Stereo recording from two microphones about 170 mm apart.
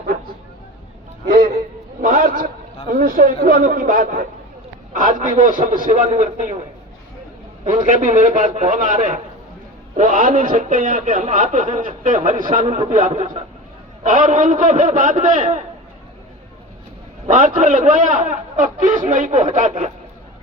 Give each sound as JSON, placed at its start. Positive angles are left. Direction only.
{"t": 2.0, "sound": "a sound", "side_deg": -50}
{"t": 2.9, "sound": "a man's voice", "side_deg": -55}
{"t": 7.6, "sound": "a man's voice", "side_deg": -50}
{"t": 17.2, "sound": "a man's voice", "side_deg": -50}